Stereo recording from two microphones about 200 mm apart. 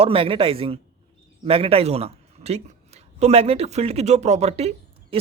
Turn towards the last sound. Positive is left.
turn(degrees=-30)  # may be behind; listen again after turning